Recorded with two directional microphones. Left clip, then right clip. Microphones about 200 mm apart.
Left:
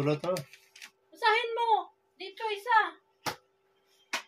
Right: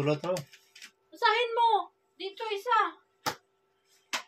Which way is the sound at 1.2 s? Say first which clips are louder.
Right 2 dB; 30° right (ahead or behind).